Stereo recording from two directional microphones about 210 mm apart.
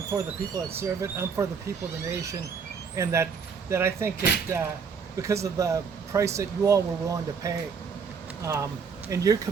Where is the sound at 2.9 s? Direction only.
15° right (ahead or behind).